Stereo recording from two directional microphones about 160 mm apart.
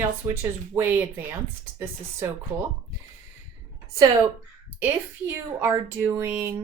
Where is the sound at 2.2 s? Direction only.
15° right (ahead or behind).